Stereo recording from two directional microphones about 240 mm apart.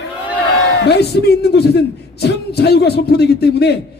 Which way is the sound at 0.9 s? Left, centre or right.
Left.